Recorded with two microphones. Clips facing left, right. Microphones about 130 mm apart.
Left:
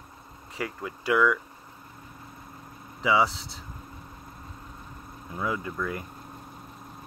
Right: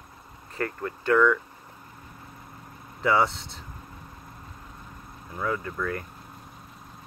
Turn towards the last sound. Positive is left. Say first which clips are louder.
# right 1 dB
turn(degrees=15)  # may be behind; listen again after turning